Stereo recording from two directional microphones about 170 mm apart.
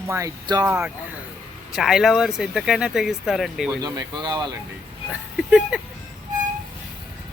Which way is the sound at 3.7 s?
20° right (ahead or behind).